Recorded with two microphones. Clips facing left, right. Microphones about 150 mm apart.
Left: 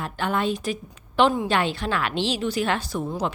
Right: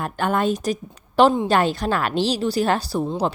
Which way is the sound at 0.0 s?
45° right (ahead or behind).